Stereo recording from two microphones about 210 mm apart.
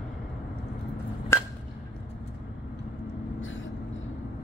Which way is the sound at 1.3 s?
10° left (ahead or behind).